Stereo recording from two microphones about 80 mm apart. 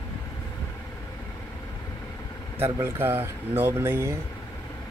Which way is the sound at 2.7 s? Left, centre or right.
Right.